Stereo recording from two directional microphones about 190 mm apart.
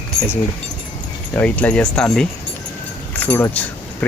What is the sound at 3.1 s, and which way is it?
Keys jangling, 10° left (ahead or behind).